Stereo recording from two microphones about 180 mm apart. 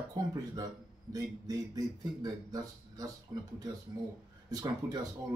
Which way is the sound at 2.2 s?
20° right (ahead or behind).